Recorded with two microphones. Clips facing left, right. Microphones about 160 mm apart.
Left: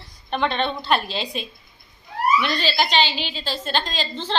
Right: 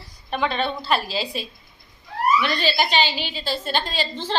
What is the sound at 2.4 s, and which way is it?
Speech, 45° right (ahead or behind).